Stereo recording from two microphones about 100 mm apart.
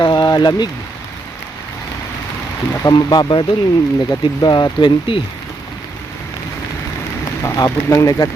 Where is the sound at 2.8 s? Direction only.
45° left (ahead or behind).